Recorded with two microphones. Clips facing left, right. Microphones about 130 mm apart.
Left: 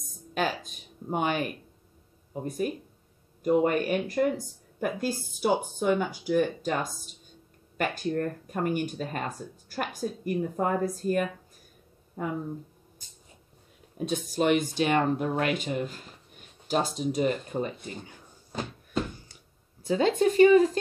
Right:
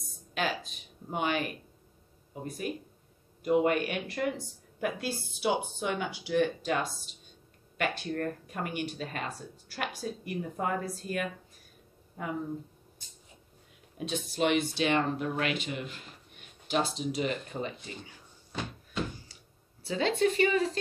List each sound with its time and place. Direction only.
0.3 s a sound: 45° left (ahead or behind)
2.4 s speech: 45° left (ahead or behind)
13.9 s speech: 45° left (ahead or behind)
19.8 s speech: 45° left (ahead or behind)